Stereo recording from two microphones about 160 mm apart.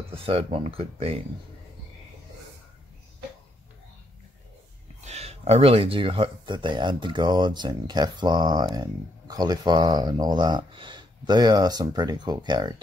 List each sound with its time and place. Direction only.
0.1 s speech: 35° right (ahead or behind)
5.0 s speech: 40° right (ahead or behind); by 12.8 s 25° right (ahead or behind)